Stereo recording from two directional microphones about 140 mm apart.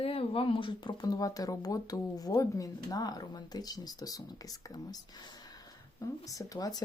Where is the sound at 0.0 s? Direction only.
45° left (ahead or behind).